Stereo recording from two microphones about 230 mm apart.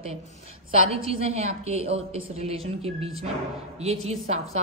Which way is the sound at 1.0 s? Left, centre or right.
Right.